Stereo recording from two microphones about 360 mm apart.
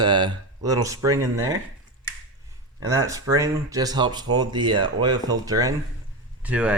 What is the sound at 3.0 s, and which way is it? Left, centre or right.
Speech, centre.